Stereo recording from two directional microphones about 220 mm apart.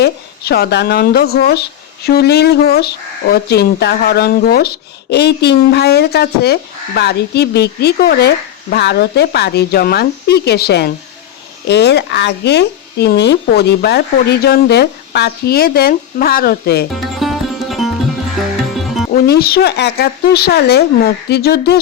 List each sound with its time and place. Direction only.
0.0 s speech: 45° left (ahead or behind)
16.9 s music: centre (ahead or behind)
19.1 s speech: 45° left (ahead or behind)